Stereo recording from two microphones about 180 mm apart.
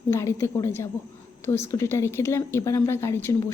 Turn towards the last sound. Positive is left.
turn(degrees=15)  # may be behind; listen again after turning